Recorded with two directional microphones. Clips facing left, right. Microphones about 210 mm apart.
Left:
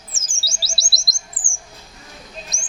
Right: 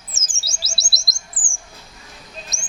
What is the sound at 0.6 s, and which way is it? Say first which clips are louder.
Chirp: left 1 dB; 20° right (ahead or behind).